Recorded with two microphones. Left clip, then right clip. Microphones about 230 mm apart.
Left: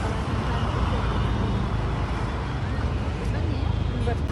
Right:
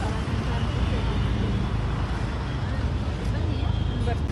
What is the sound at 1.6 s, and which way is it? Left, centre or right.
Vehicle, centre.